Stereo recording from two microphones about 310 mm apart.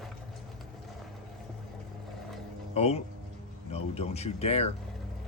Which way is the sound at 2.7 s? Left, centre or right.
Centre.